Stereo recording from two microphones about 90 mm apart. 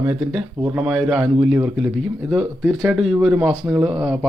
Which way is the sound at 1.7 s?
5° right (ahead or behind).